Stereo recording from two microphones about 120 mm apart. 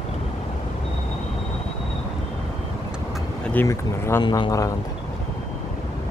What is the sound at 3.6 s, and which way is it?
Speech, 20° left (ahead or behind).